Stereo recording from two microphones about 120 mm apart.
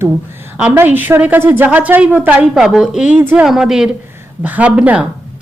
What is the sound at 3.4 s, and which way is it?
A woman's voice, 5° right (ahead or behind).